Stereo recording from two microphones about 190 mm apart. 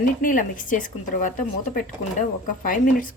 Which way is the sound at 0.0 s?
45° left (ahead or behind).